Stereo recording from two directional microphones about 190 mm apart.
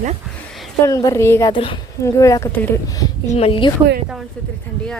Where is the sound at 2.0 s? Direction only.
15° left (ahead or behind).